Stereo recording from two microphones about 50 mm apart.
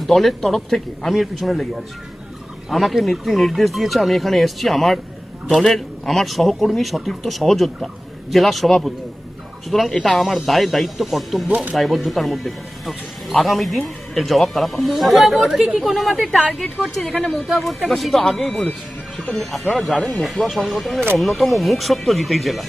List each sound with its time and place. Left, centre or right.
0.1 s speech: centre
11.4 s speech: right
11.7 s speech: centre
17.2 s speech: left
17.4 s speech: centre